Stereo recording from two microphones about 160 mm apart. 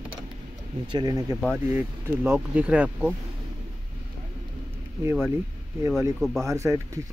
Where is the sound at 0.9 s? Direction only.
25° right (ahead or behind).